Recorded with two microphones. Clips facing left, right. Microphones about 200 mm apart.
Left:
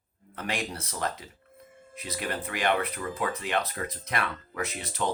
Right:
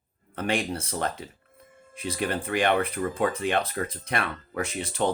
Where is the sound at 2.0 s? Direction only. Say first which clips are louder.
Right 5 dB; 30° right (ahead or behind).